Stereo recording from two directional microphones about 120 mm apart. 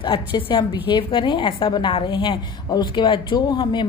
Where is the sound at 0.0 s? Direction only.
45° left (ahead or behind).